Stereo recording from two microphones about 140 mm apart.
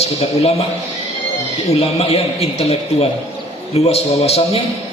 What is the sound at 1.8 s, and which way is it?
A man's voice, 45° left (ahead or behind).